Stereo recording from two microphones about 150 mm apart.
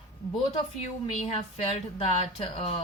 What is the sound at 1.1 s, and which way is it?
Speech, 50° left (ahead or behind).